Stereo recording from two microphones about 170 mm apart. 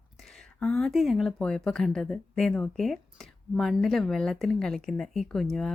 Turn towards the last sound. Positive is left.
turn(degrees=0)  # may be behind; listen again after turning